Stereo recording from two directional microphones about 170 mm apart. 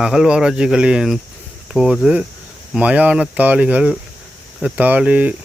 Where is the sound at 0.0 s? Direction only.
5° right (ahead or behind).